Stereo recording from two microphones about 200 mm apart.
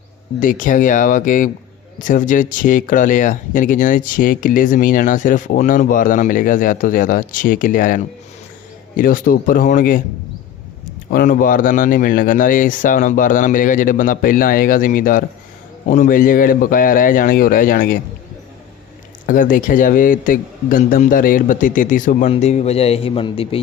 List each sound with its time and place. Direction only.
0.3 s speech: 40° left (ahead or behind)
11.1 s speech: 40° left (ahead or behind)
19.2 s a man's voice: 45° left (ahead or behind); by 23.6 s 30° left (ahead or behind)